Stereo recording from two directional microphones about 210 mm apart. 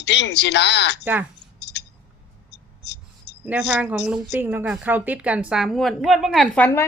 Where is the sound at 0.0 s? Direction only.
55° left (ahead or behind).